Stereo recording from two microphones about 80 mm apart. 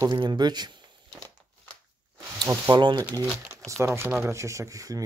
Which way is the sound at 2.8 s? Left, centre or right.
Right.